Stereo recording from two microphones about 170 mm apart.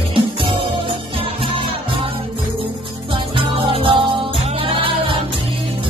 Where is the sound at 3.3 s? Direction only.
30° right (ahead or behind).